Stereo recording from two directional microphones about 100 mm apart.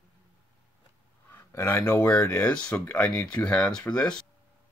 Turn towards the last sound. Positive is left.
turn(degrees=10)  # may be behind; listen again after turning